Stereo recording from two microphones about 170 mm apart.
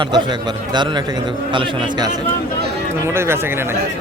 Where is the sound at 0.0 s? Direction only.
25° right (ahead or behind).